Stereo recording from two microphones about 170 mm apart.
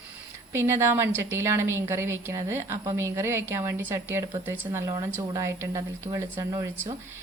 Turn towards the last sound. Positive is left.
turn(degrees=-15)  # may be behind; listen again after turning